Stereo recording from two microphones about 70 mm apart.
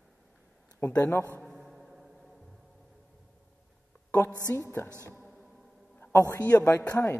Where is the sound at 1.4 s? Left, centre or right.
Centre.